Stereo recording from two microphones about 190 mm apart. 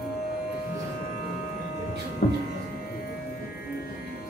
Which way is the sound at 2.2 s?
55° left (ahead or behind).